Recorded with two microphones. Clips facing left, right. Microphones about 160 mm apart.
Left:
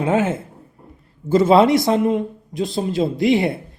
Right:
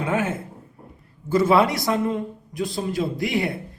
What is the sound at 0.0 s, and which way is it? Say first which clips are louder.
A woman's voice: left 5 dB; 25° left (ahead or behind).